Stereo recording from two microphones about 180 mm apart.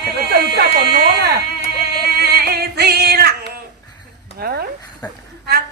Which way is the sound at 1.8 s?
60° right (ahead or behind).